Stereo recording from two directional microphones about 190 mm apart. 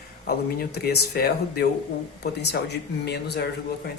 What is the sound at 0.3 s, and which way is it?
Speech, 60° left (ahead or behind).